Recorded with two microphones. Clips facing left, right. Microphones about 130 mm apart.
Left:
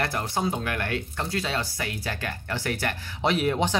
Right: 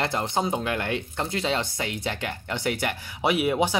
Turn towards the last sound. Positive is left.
turn(degrees=-10)  # may be behind; listen again after turning